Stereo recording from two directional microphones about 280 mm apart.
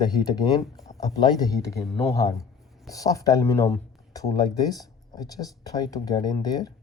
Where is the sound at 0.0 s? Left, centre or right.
Centre.